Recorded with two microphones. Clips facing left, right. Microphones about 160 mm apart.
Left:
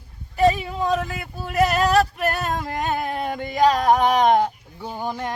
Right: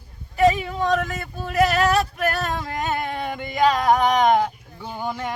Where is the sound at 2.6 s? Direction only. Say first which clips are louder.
Left 1 dB; centre (ahead or behind).